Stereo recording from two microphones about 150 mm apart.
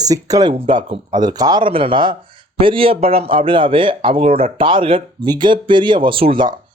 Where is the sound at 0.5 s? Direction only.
35° right (ahead or behind).